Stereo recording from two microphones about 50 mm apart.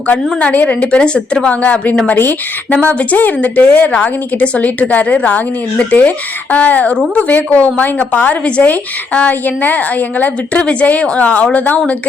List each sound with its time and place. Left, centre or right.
0.3 s a woman's voice: left
10.6 s a woman's voice: left